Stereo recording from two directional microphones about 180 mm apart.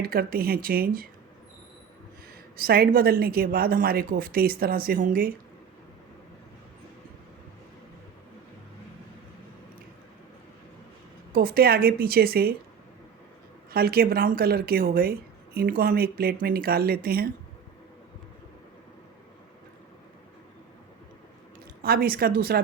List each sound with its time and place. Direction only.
0.0 s a woman's voice: 55° right (ahead or behind)
2.6 s a woman's voice: 55° right (ahead or behind)
11.3 s a woman's voice: 55° right (ahead or behind)
13.7 s a woman's voice: 55° right (ahead or behind)
21.8 s a woman's voice: 55° right (ahead or behind)